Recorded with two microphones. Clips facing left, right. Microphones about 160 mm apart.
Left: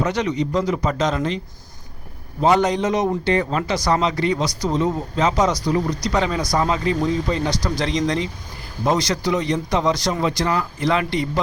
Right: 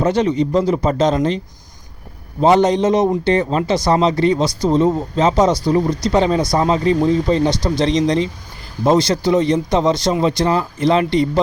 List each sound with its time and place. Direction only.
0.0 s a man's voice: 30° right (ahead or behind)
2.4 s speech: 25° right (ahead or behind)